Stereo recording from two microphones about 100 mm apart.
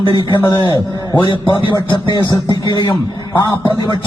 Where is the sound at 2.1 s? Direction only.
40° left (ahead or behind).